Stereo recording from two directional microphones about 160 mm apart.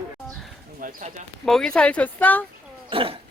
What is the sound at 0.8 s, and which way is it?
Speech, 60° right (ahead or behind).